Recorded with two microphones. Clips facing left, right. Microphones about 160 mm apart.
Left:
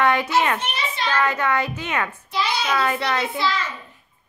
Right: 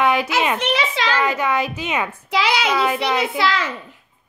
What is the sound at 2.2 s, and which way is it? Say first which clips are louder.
Speech: right 5 dB; 90° right.